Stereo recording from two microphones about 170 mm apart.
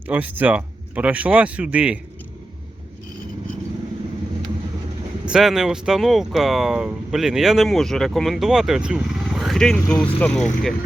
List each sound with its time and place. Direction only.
0.1 s speech: 10° right (ahead or behind)
5.2 s speech: 5° right (ahead or behind)
9.8 s speech: 15° left (ahead or behind)
10.2 s speech: 5° left (ahead or behind)